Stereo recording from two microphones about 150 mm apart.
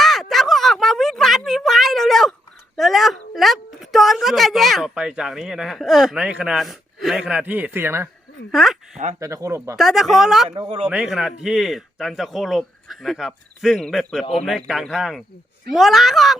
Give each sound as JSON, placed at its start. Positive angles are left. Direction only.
{"t": 0.0, "sound": "a sound", "side_deg": 0}
{"t": 8.5, "sound": "speech", "side_deg": 0}
{"t": 9.2, "sound": "speech", "side_deg": -20}
{"t": 9.7, "sound": "speech", "side_deg": 0}
{"t": 10.5, "sound": "speech", "side_deg": -40}
{"t": 10.8, "sound": "speech", "side_deg": -5}